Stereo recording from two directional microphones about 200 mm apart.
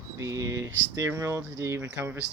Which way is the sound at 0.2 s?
15° right (ahead or behind).